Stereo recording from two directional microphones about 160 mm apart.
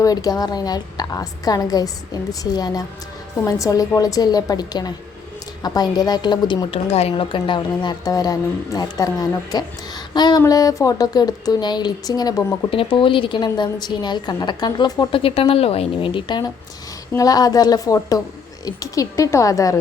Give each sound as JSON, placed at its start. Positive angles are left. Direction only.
{"t": 0.0, "sound": "speech", "side_deg": 25}
{"t": 15.2, "sound": "a woman's voice", "side_deg": 40}